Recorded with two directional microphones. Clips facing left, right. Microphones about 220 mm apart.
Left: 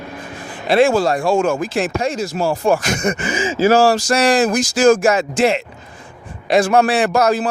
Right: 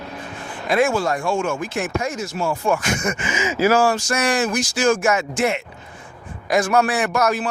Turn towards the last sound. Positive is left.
turn(degrees=35)  # may be behind; listen again after turning